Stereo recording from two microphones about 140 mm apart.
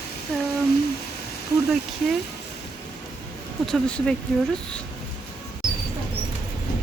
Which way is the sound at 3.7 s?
5° left (ahead or behind).